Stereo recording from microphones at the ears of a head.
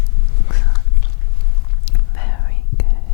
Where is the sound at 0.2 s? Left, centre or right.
Left.